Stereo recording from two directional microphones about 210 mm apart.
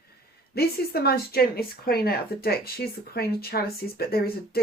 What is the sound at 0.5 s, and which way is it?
Speech, 50° left (ahead or behind).